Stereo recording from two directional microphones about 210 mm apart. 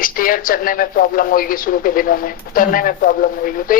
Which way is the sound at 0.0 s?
40° left (ahead or behind).